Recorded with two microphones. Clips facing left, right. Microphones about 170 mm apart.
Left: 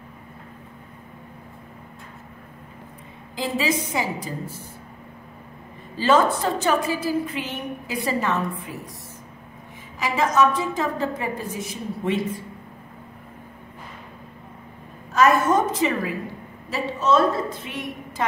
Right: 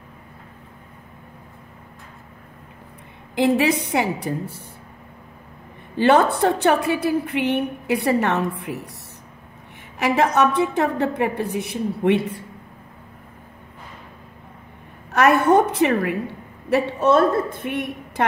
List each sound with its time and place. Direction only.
3.3 s a woman's voice: 65° right (ahead or behind)
5.9 s a woman's voice: 60° right (ahead or behind)
9.9 s a woman's voice: 65° right (ahead or behind)
15.1 s a woman's voice: 65° right (ahead or behind)